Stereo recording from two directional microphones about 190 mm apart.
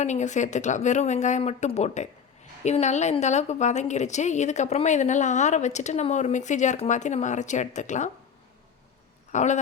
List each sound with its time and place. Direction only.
0.0 s a woman's voice: 40° left (ahead or behind)
9.3 s speech: 40° left (ahead or behind)